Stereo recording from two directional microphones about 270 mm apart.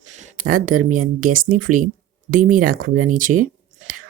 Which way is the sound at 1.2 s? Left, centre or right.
Right.